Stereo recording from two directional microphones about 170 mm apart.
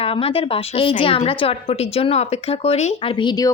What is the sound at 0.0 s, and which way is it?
A woman's voice, 35° left (ahead or behind).